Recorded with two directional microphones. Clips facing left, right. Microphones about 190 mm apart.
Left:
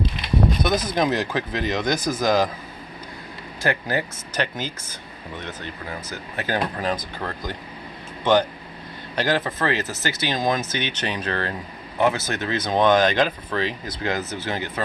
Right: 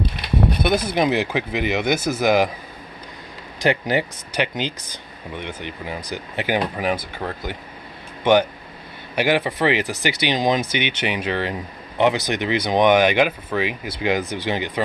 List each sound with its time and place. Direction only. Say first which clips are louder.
0.6 s speech: right 2 dB; 10° right (ahead or behind)
3.6 s speech: right 4 dB; 15° right (ahead or behind)